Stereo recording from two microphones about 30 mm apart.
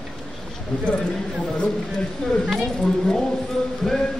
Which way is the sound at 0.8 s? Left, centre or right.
Left.